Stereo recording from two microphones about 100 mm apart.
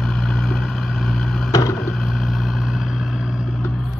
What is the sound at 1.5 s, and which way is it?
Vehicle, 35° left (ahead or behind).